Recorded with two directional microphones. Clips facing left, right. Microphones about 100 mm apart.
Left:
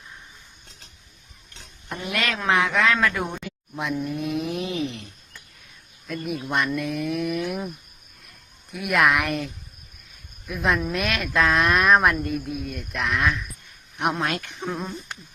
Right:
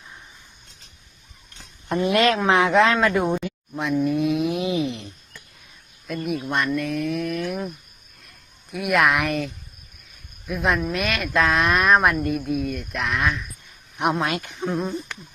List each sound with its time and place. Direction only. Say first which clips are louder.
1.9 s speech: right 9 dB; 30° right (ahead or behind)
4.0 s a sound: right 6 dB; centre (ahead or behind); by 5.1 s 20° right (ahead or behind)
6.1 s speech: right 2 dB; centre (ahead or behind)